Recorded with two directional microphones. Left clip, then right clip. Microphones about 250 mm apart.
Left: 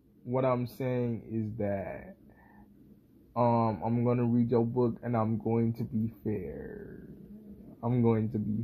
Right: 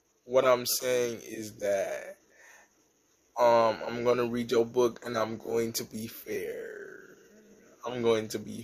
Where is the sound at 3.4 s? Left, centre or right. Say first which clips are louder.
Right 5 dB; right.